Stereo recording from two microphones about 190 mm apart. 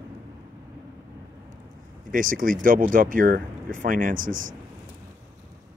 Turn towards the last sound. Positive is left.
turn(degrees=-45)  # may be behind; listen again after turning